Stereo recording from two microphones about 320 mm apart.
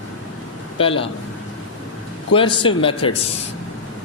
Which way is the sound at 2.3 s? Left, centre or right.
Centre.